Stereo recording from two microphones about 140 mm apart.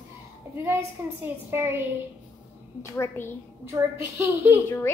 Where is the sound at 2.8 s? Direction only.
20° left (ahead or behind).